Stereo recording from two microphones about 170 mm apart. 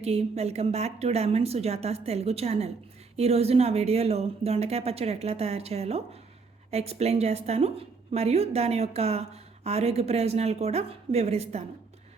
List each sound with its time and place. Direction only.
0.0 s a woman's voice: 40° right (ahead or behind)